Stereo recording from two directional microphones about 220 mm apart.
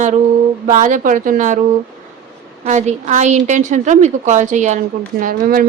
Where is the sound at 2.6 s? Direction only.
30° right (ahead or behind).